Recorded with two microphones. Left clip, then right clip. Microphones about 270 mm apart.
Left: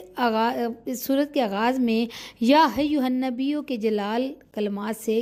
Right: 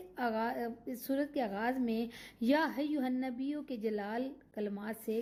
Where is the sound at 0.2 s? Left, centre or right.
Left.